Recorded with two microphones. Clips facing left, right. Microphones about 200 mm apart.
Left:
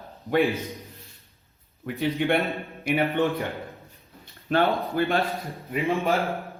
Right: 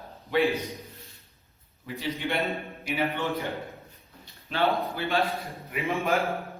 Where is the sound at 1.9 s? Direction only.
55° left (ahead or behind).